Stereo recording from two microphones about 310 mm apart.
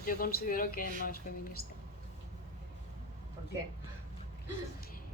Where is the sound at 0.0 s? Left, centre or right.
Left.